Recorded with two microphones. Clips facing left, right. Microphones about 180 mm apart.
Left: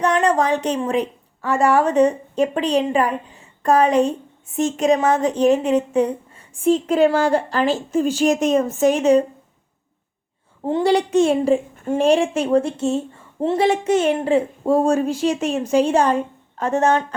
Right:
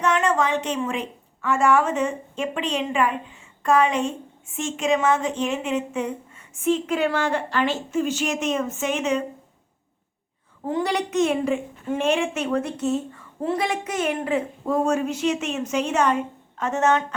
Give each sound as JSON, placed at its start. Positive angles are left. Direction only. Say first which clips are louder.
{"t": 0.0, "sound": "a woman's voice", "louder": "left 4 dB", "side_deg": 35}
{"t": 10.6, "sound": "a woman's voice", "louder": "left 7 dB", "side_deg": 30}